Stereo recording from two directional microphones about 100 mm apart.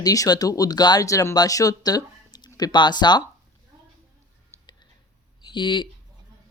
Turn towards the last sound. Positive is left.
turn(degrees=50)  # may be behind; listen again after turning